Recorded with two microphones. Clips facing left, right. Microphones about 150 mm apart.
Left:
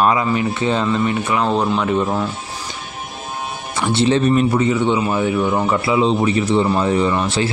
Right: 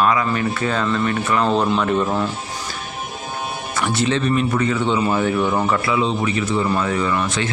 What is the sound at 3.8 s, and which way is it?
Speech, 25° left (ahead or behind).